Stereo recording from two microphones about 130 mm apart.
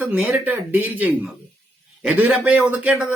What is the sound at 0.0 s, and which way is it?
A man's voice, 10° right (ahead or behind).